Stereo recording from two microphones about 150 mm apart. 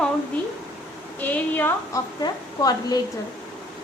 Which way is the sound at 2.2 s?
25° left (ahead or behind).